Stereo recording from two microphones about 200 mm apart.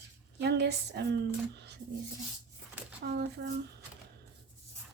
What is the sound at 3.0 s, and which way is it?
Speech, 60° right (ahead or behind).